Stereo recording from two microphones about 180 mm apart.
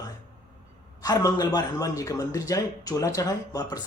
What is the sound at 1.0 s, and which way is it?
Speech, 20° left (ahead or behind).